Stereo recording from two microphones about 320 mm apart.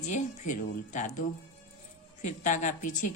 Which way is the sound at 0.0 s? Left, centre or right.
Left.